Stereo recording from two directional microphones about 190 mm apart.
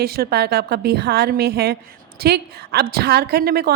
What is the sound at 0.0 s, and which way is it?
A woman's voice, 55° right (ahead or behind).